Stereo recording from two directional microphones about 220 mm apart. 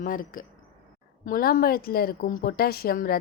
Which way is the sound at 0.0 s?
40° left (ahead or behind).